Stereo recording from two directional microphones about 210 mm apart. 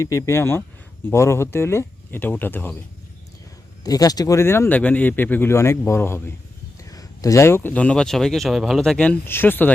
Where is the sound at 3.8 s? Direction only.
20° left (ahead or behind).